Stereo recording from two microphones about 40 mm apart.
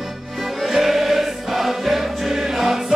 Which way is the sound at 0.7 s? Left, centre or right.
Centre.